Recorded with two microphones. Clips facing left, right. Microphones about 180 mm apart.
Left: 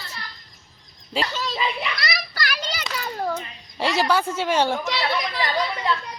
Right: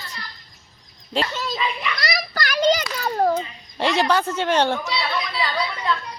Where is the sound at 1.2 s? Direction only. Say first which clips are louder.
Right 2 dB; 5° left (ahead or behind).